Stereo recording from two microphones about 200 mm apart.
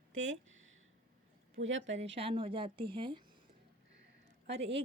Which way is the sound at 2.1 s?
25° right (ahead or behind).